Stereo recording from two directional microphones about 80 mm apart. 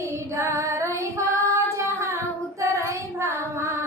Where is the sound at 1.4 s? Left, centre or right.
Right.